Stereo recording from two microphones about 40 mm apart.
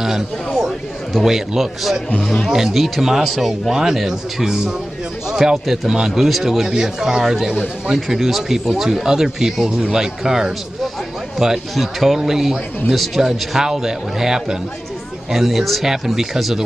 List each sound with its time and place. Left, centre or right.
1.2 s speech: centre
2.2 s speech: centre
2.5 s speech: centre